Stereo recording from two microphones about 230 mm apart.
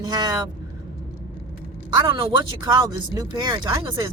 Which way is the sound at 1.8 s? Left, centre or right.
Right.